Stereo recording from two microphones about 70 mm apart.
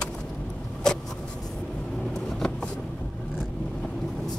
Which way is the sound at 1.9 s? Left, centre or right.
Centre.